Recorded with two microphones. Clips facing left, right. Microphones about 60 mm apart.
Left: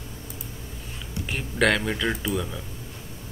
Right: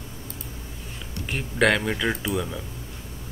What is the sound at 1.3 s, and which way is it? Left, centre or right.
Speech, centre.